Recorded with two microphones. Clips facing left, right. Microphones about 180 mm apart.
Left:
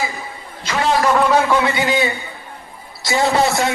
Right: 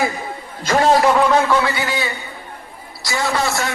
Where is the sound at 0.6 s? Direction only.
45° right (ahead or behind).